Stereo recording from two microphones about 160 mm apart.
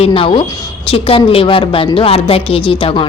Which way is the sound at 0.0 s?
35° left (ahead or behind).